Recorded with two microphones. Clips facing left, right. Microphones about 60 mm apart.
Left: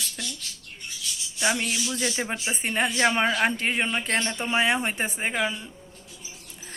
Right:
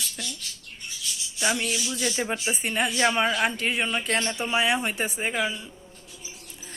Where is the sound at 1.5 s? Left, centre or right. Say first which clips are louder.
Left 1 dB; left.